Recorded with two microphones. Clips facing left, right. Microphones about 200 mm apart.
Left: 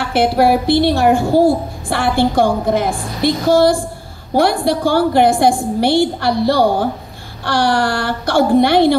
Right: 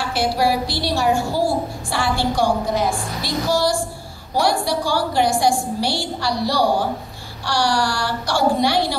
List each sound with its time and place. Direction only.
0.0 s a woman's voice: 55° left (ahead or behind)